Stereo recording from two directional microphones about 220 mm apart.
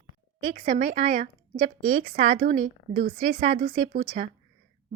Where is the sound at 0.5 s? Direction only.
35° right (ahead or behind).